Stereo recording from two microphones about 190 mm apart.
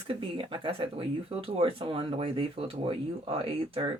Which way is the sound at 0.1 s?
25° right (ahead or behind).